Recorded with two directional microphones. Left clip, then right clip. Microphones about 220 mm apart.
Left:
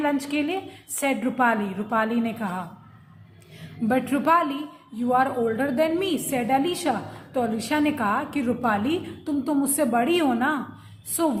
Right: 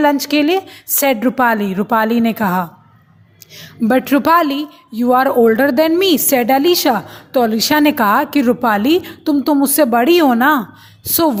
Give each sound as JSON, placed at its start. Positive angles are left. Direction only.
{"t": 0.0, "sound": "a woman's voice", "side_deg": -40}
{"t": 3.8, "sound": "a woman's voice", "side_deg": -40}